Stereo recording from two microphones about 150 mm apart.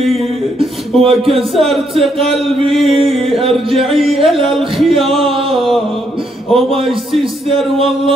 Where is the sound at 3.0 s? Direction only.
40° right (ahead or behind).